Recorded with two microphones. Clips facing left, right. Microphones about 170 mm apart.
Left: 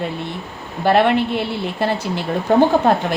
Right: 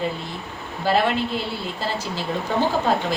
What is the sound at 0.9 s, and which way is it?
Speech, 65° left (ahead or behind).